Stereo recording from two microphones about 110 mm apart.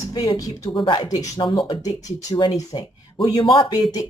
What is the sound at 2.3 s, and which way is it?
Speech, 45° left (ahead or behind).